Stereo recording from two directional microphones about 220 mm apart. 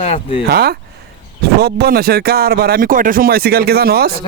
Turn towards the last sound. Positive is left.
turn(degrees=-45)  # may be behind; listen again after turning